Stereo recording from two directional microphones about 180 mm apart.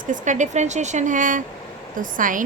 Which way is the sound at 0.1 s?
45° right (ahead or behind).